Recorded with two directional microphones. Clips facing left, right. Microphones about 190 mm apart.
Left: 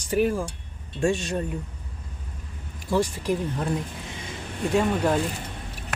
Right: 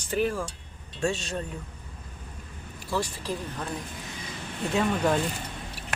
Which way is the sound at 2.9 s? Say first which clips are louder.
Left 6 dB; 20° left (ahead or behind).